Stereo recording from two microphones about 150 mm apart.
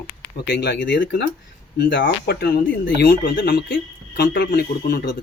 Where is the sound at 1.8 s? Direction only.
90° left; by 3.8 s 65° left (ahead or behind).